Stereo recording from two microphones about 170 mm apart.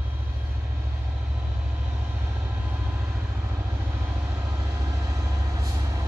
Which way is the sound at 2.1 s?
15° right (ahead or behind).